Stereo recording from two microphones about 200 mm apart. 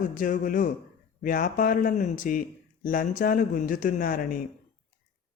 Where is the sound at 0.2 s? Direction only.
45° left (ahead or behind).